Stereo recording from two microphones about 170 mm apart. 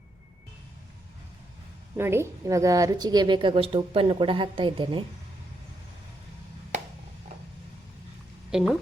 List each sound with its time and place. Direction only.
2.0 s a woman's voice: 15° right (ahead or behind)
8.4 s speech: 5° right (ahead or behind)